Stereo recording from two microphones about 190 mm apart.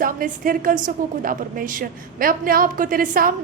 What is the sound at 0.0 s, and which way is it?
A woman's voice, 45° right (ahead or behind).